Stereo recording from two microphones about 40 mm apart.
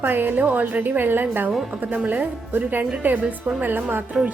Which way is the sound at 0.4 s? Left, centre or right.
Right.